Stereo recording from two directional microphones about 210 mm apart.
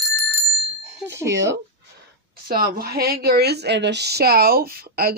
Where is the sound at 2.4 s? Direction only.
45° right (ahead or behind).